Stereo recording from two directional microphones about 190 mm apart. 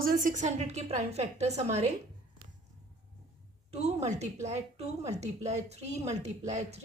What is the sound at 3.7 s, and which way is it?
A woman's voice, 35° right (ahead or behind).